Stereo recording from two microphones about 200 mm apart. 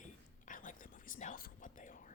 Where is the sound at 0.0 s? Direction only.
40° left (ahead or behind).